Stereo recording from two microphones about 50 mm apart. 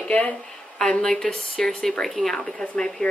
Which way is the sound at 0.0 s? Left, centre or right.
Left.